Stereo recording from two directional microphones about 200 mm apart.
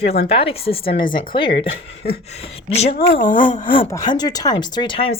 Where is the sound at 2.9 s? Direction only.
45° left (ahead or behind).